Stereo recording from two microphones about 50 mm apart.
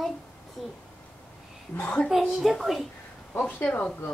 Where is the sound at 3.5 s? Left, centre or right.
Left.